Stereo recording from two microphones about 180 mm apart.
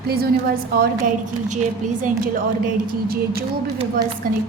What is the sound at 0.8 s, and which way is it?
A woman's voice, 50° right (ahead or behind).